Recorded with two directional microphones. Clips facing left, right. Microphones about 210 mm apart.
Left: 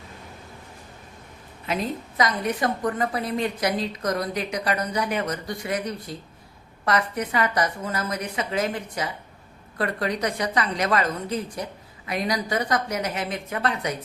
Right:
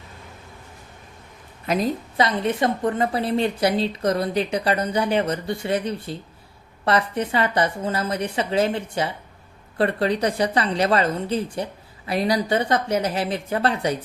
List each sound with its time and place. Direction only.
1.6 s a woman's voice: 40° right (ahead or behind)